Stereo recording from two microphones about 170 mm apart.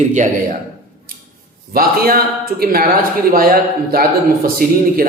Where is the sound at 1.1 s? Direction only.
60° right (ahead or behind).